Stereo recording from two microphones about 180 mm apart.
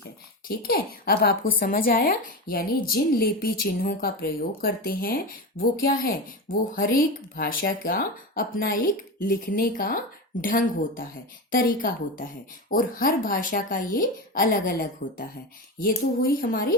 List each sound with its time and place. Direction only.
0.4 s a woman's voice: 55° left (ahead or behind)